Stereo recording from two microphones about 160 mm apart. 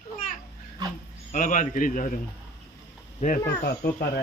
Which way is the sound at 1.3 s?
55° left (ahead or behind).